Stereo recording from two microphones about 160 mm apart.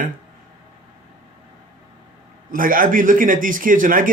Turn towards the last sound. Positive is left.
turn(degrees=-60)  # may be behind; listen again after turning